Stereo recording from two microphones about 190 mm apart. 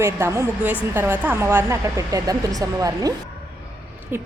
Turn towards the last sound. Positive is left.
turn(degrees=-10)  # may be behind; listen again after turning